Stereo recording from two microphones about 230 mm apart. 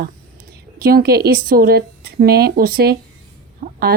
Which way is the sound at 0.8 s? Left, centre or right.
Right.